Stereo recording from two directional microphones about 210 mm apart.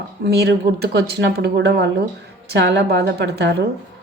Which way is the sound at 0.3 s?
50° right (ahead or behind).